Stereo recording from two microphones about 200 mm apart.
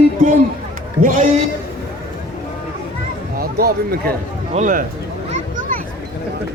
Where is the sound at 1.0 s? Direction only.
40° right (ahead or behind).